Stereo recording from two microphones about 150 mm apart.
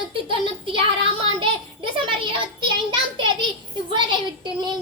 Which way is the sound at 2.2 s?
35° right (ahead or behind).